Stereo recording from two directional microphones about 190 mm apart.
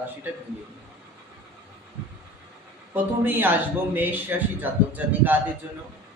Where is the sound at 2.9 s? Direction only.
10° right (ahead or behind).